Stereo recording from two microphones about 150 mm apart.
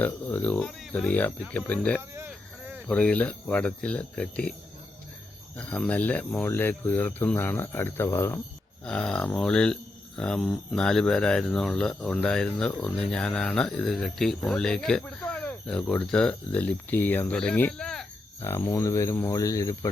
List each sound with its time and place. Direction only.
0.0 s speech: 10° left (ahead or behind)
2.0 s a sound: 15° right (ahead or behind)
2.8 s speech: 10° left (ahead or behind)
5.5 s speech: 5° left (ahead or behind)
8.8 s speech: 5° left (ahead or behind)
18.4 s speech: 15° left (ahead or behind)